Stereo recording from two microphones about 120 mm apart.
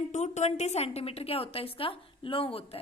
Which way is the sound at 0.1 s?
75° left (ahead or behind).